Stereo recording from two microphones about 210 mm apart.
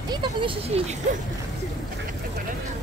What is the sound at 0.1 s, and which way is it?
Speech, 25° right (ahead or behind).